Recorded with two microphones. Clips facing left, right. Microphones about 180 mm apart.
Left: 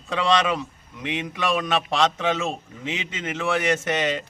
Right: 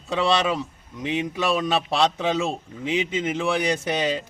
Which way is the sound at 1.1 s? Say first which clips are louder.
Right 2 dB; 35° right (ahead or behind).